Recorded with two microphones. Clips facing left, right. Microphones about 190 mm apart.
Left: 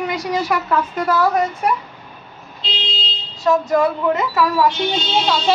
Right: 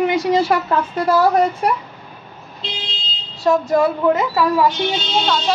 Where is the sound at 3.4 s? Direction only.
30° right (ahead or behind).